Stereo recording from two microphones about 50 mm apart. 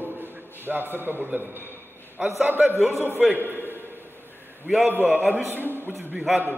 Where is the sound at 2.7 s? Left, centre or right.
Right.